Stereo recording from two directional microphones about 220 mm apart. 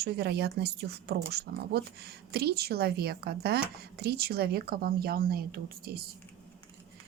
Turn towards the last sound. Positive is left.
turn(degrees=-45)  # may be behind; listen again after turning